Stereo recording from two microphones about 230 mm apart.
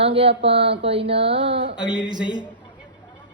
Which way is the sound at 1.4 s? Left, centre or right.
Right.